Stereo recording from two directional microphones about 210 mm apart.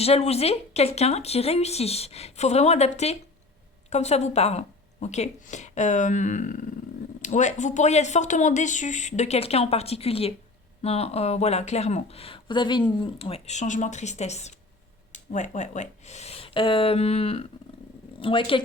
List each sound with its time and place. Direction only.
0.0 s speech: 30° left (ahead or behind)